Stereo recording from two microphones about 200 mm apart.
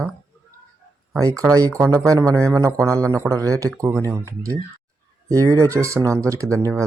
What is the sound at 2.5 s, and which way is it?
Speech, 15° right (ahead or behind).